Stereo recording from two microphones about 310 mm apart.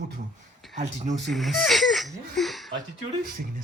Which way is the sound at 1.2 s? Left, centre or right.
Centre.